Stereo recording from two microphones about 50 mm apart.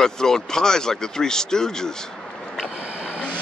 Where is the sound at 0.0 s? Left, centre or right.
Centre.